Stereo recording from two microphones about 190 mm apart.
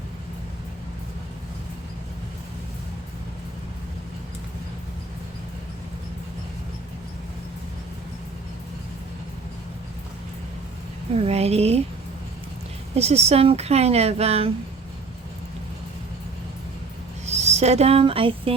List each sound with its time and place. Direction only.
11.3 s speech: 35° right (ahead or behind)
13.0 s speech: 35° right (ahead or behind)
17.2 s speech: 35° right (ahead or behind)